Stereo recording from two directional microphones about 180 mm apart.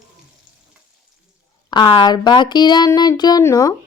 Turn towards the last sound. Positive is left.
turn(degrees=20)  # may be behind; listen again after turning